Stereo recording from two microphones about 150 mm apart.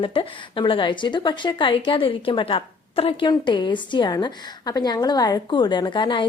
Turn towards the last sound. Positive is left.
turn(degrees=30)  # may be behind; listen again after turning